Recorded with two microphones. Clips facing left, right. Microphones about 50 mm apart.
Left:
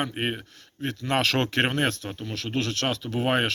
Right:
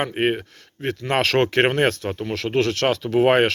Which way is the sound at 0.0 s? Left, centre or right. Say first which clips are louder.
Right 7 dB; right.